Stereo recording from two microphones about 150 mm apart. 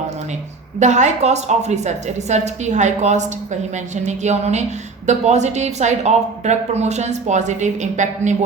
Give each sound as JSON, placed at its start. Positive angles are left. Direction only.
{"t": 0.8, "sound": "a woman's voice", "side_deg": -50}